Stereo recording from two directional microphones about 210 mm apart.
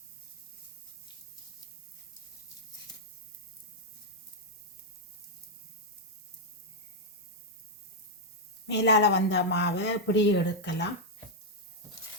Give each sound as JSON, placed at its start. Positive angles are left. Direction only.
{"t": 8.6, "sound": "speech", "side_deg": 55}